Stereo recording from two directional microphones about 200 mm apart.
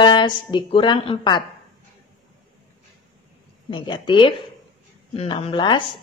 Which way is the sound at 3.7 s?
25° left (ahead or behind).